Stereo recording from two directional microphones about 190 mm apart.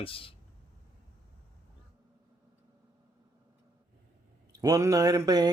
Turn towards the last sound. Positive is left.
turn(degrees=-20)  # may be behind; listen again after turning